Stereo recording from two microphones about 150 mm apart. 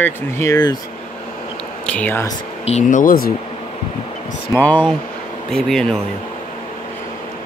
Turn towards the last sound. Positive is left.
turn(degrees=5)  # may be behind; listen again after turning